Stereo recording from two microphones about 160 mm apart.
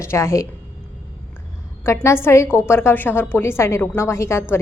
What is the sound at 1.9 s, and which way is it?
A woman's voice, 15° left (ahead or behind).